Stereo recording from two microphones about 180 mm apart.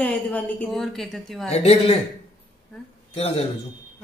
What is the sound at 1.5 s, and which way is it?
Speech, 35° left (ahead or behind).